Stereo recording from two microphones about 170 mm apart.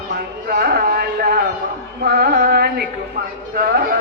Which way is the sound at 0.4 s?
65° right (ahead or behind).